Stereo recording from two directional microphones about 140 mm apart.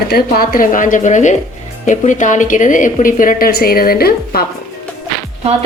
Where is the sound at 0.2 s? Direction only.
90° left.